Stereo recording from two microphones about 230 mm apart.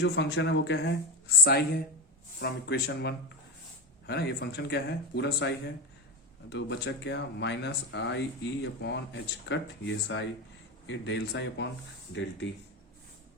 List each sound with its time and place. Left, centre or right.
0.0 s speech: left